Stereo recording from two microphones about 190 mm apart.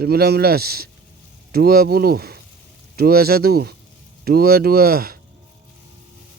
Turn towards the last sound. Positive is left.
turn(degrees=-55)  # may be behind; listen again after turning